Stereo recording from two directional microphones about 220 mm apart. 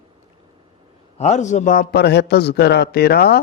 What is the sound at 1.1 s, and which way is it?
A man's voice, 30° left (ahead or behind).